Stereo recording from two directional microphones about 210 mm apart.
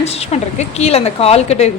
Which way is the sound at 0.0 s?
30° left (ahead or behind).